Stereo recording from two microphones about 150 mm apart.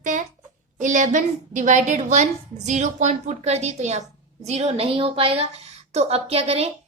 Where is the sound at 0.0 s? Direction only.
55° right (ahead or behind).